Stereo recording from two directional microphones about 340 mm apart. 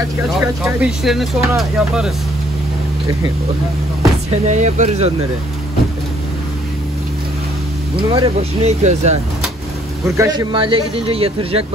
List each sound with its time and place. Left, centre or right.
0.4 s speech: centre
4.5 s speech: right
8.1 s a man's voice: centre